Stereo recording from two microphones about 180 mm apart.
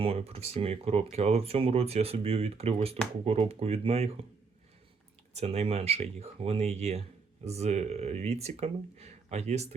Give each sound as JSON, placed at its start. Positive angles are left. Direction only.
{"t": 0.0, "sound": "speech", "side_deg": -35}
{"t": 5.3, "sound": "speech", "side_deg": -35}